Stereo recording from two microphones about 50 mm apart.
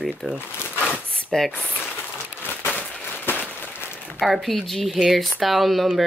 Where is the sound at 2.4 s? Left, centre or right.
Right.